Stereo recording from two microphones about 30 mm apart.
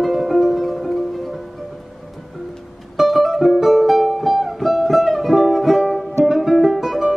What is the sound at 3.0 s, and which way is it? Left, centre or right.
Music, centre.